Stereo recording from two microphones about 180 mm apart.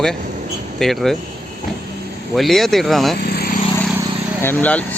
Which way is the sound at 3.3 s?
55° left (ahead or behind).